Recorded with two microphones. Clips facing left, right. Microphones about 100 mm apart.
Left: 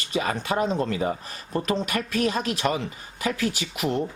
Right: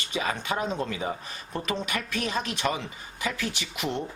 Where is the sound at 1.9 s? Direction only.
35° left (ahead or behind).